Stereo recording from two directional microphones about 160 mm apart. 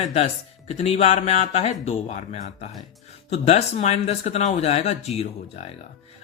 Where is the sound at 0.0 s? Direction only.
45° left (ahead or behind).